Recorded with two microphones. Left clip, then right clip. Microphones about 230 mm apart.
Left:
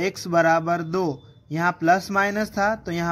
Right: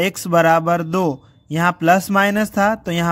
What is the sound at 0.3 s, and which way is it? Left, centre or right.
A man's voice, right.